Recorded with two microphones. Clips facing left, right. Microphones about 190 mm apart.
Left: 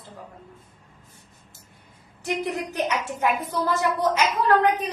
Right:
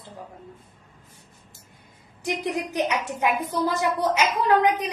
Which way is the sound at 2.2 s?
15° right (ahead or behind).